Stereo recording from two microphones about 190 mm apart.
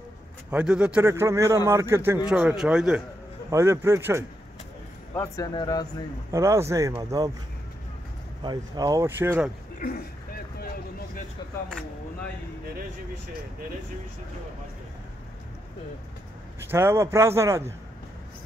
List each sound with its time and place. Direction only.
0.5 s a man's voice: 5° right (ahead or behind)
3.4 s a man's voice: 15° right (ahead or behind)
5.1 s speech: 20° left (ahead or behind)
6.3 s a man's voice: 15° right (ahead or behind)
8.4 s a man's voice: 20° right (ahead or behind)
9.8 s speech: 50° left (ahead or behind)
16.7 s a man's voice: 15° right (ahead or behind)